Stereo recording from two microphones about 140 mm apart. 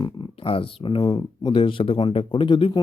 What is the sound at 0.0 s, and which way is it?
Speech, 40° left (ahead or behind).